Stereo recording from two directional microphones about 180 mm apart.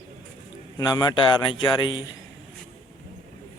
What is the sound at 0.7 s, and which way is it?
Speech, 25° left (ahead or behind).